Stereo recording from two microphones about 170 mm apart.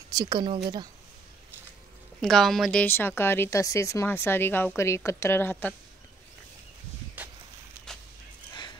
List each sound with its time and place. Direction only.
0.1 s speech: 25° right (ahead or behind)
2.2 s speech: centre (ahead or behind)
7.2 s a sound: 10° right (ahead or behind)